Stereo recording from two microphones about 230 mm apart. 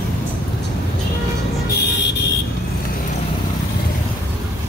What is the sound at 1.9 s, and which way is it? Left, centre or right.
Vehicle, left.